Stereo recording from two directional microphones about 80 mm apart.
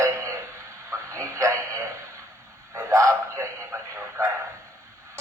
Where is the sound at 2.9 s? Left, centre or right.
Right.